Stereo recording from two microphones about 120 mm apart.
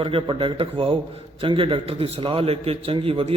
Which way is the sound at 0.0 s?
45° right (ahead or behind).